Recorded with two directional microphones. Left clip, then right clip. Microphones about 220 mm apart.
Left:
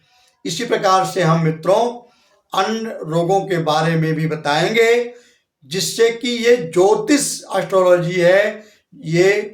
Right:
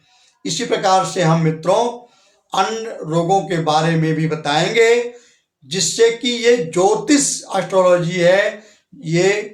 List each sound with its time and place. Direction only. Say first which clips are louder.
0.4 s speech: even; 5° left (ahead or behind)